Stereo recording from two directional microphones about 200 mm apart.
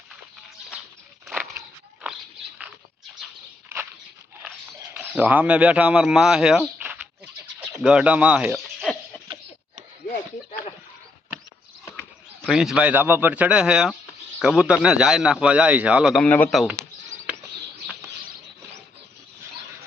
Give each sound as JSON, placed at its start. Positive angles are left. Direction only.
{"t": 1.3, "sound": "biting", "side_deg": -5}
{"t": 4.9, "sound": "speech", "side_deg": -10}
{"t": 10.1, "sound": "a sound", "side_deg": 35}
{"t": 11.9, "sound": "a man's voice", "side_deg": 0}